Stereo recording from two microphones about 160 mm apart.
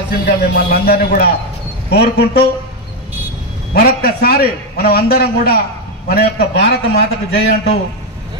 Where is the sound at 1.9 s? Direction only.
90° left.